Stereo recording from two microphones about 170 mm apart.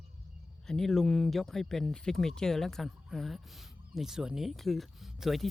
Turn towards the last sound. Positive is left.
turn(degrees=0)  # may be behind; listen again after turning